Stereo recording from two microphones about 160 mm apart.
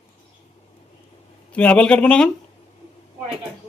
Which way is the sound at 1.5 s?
10° left (ahead or behind).